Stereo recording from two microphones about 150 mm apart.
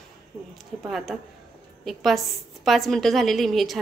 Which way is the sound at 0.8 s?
Centre (ahead or behind).